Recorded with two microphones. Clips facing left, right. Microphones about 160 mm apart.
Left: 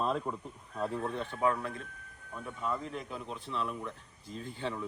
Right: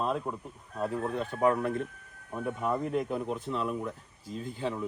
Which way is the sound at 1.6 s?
60° right (ahead or behind).